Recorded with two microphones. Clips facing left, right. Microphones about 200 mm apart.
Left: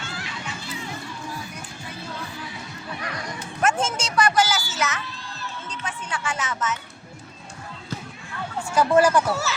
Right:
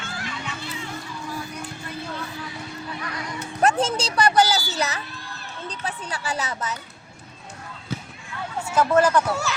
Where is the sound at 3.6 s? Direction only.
35° right (ahead or behind).